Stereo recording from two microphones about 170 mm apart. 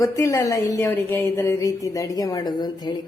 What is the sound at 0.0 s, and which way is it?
A woman's voice, 20° left (ahead or behind).